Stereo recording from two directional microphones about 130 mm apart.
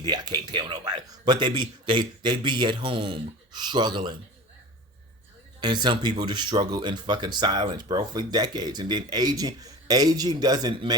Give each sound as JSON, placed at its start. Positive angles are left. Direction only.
{"t": 0.0, "sound": "speech", "side_deg": -35}
{"t": 5.5, "sound": "speech", "side_deg": -35}